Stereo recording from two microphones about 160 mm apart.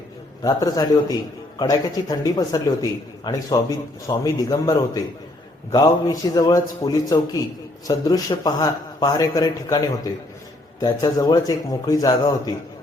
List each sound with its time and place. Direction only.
0.4 s a man's voice: 25° left (ahead or behind)